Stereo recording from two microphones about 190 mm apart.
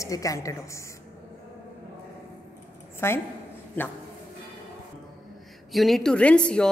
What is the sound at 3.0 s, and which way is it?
Speech, 15° left (ahead or behind).